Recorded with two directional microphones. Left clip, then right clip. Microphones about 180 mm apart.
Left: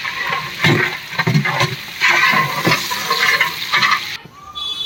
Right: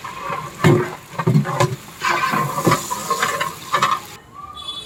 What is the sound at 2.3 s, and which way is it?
Stir, 10° left (ahead or behind).